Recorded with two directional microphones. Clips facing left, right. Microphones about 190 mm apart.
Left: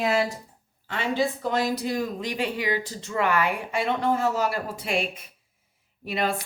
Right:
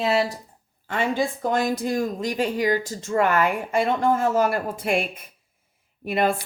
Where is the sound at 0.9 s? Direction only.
50° right (ahead or behind).